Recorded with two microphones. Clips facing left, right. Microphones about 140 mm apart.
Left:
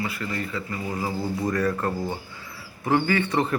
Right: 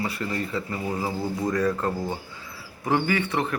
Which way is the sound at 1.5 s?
15° right (ahead or behind).